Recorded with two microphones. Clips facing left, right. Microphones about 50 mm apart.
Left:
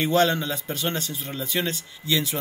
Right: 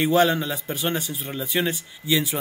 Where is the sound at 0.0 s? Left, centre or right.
Centre.